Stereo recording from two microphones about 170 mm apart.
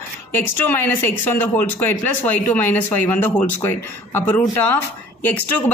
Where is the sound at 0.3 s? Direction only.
15° left (ahead or behind).